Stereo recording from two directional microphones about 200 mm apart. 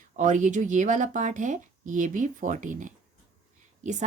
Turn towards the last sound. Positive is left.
turn(degrees=-35)  # may be behind; listen again after turning